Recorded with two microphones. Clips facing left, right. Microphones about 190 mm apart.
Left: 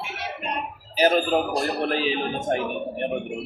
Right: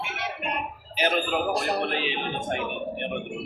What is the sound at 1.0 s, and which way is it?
A man's voice, 35° left (ahead or behind).